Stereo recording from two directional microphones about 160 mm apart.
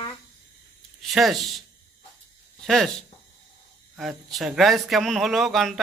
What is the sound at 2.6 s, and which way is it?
Speech, centre (ahead or behind).